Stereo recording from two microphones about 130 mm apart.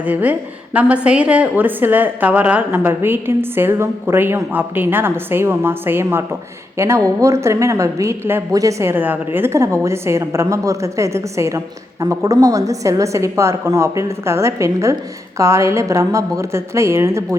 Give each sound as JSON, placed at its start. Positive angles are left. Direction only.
{"t": 0.0, "sound": "a woman's voice", "side_deg": -10}